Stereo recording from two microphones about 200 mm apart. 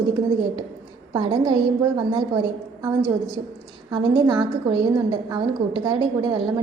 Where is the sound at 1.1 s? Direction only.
20° right (ahead or behind).